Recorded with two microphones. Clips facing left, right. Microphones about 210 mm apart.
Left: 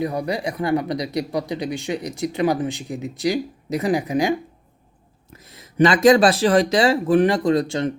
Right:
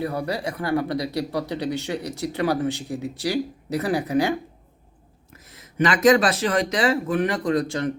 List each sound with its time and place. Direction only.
0.0 s speech: 15° left (ahead or behind)
5.4 s speech: 30° left (ahead or behind)